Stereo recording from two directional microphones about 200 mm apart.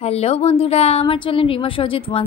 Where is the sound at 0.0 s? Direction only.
30° left (ahead or behind).